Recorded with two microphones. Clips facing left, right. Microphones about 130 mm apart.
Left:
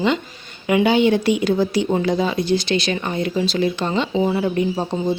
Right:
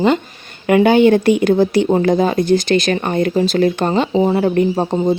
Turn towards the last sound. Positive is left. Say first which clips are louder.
# right 5 dB
turn(degrees=-45)  # may be behind; listen again after turning